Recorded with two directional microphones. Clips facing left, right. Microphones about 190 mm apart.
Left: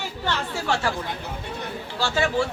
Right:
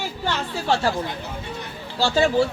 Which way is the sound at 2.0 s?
30° right (ahead or behind).